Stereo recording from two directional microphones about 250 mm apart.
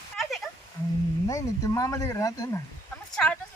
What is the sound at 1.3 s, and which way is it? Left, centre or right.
A woman's voice, centre.